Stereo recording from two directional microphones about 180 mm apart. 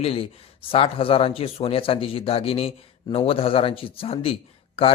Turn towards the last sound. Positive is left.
turn(degrees=30)  # may be behind; listen again after turning